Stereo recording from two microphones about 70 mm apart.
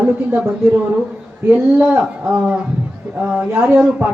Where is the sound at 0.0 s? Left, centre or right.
Centre.